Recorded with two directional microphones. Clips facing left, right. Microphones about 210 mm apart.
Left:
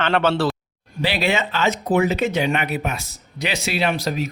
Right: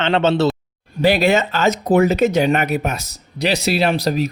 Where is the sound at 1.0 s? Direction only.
45° right (ahead or behind).